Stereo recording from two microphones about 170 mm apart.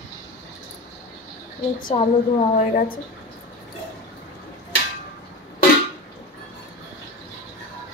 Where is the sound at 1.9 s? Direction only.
30° left (ahead or behind).